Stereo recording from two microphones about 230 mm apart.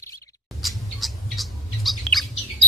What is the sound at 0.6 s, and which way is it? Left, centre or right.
Bird, centre.